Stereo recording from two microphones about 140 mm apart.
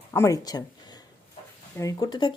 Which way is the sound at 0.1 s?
20° left (ahead or behind).